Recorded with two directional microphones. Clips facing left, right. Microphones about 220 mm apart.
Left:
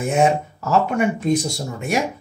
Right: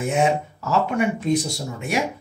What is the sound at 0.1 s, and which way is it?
Speech, 45° left (ahead or behind).